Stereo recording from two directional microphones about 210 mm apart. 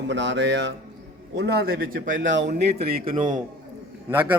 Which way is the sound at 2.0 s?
65° right (ahead or behind).